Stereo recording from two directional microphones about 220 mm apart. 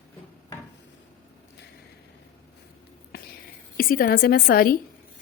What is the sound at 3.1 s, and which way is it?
Whispering, 45° left (ahead or behind).